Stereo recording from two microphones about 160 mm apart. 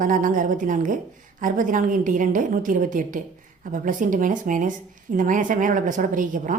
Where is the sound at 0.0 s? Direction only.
55° right (ahead or behind).